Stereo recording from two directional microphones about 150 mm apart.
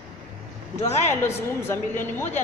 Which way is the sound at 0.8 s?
15° left (ahead or behind).